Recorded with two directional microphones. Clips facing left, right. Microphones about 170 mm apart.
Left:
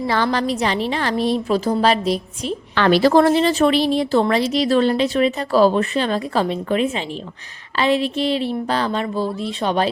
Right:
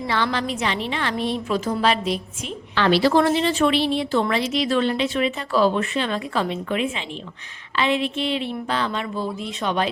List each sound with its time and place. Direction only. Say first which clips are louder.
0.1 s a woman's voice: left 3 dB; 40° left (ahead or behind)
2.7 s a woman's voice: left 4 dB; 50° left (ahead or behind)